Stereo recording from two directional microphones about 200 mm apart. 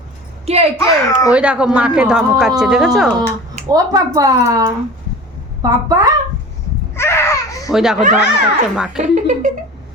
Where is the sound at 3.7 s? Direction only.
15° right (ahead or behind).